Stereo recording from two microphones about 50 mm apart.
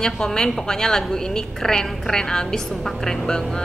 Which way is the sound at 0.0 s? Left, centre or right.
Centre.